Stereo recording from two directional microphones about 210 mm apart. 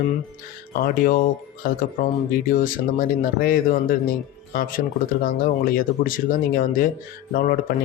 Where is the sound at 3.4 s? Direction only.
45° left (ahead or behind).